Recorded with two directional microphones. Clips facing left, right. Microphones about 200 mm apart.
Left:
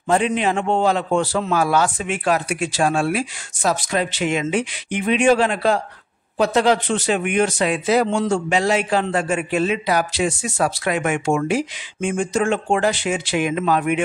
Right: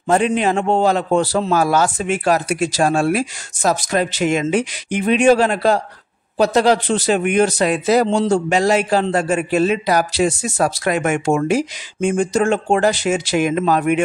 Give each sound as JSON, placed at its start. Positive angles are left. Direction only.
{"t": 0.1, "sound": "a man's voice", "side_deg": -45}